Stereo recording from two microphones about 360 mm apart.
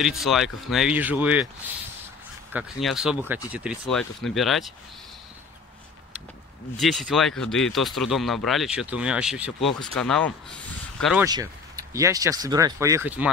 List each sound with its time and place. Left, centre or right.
0.0 s speech: centre
2.5 s speech: centre
6.8 s speech: centre
11.2 s speech: centre